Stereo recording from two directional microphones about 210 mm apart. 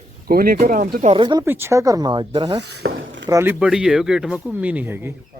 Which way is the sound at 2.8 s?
50° right (ahead or behind).